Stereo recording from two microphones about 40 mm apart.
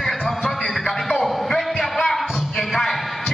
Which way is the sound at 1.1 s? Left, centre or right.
Centre.